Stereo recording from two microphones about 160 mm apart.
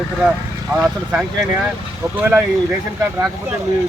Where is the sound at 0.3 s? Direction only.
5° right (ahead or behind).